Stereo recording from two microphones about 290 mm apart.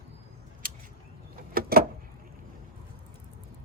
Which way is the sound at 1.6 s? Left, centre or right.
Right.